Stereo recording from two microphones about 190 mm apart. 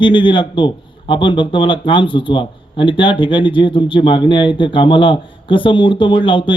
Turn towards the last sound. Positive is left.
turn(degrees=25)  # may be behind; listen again after turning